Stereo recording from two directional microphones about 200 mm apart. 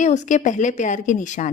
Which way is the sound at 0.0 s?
35° left (ahead or behind).